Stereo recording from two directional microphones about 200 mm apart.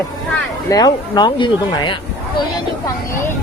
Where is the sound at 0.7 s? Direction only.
20° left (ahead or behind).